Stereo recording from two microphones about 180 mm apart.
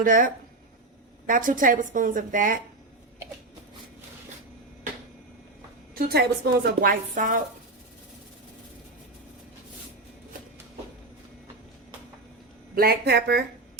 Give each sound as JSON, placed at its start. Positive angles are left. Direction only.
{"t": 0.0, "sound": "a woman's voice", "side_deg": -50}
{"t": 1.3, "sound": "a woman's voice", "side_deg": -50}
{"t": 5.9, "sound": "a woman's voice", "side_deg": -60}
{"t": 7.1, "sound": "a woman's voice", "side_deg": -45}
{"t": 12.7, "sound": "a woman's voice", "side_deg": -60}